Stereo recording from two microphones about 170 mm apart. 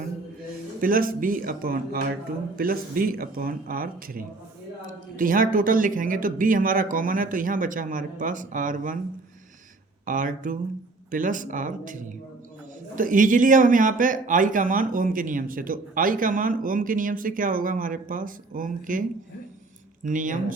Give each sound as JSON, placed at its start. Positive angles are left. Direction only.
{"t": 0.8, "sound": "speech", "side_deg": -55}
{"t": 10.1, "sound": "speech", "side_deg": -50}
{"t": 20.1, "sound": "speech", "side_deg": -50}